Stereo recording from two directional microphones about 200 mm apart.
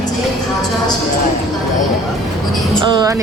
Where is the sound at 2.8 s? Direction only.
20° right (ahead or behind).